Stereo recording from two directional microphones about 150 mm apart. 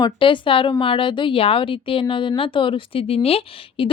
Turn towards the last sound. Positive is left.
turn(degrees=40)  # may be behind; listen again after turning